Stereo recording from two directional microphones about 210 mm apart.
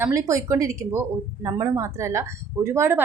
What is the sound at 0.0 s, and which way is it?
A woman's voice, 15° right (ahead or behind).